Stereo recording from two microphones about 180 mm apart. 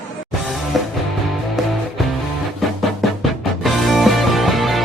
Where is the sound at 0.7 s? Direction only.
Centre (ahead or behind).